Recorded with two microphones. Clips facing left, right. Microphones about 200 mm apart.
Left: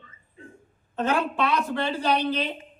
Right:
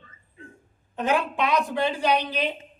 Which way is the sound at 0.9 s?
15° right (ahead or behind).